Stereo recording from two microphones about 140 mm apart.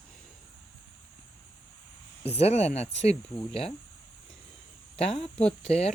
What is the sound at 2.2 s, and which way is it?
Speech, 50° left (ahead or behind).